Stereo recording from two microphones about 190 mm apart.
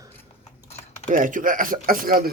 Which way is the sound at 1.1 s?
45° right (ahead or behind).